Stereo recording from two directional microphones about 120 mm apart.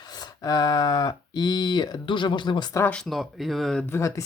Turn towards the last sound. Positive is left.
turn(degrees=25)  # may be behind; listen again after turning